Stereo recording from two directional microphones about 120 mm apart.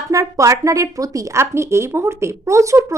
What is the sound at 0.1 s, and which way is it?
Speech, 25° right (ahead or behind).